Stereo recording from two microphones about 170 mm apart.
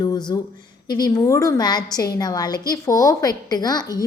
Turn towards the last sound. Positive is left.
turn(degrees=20)  # may be behind; listen again after turning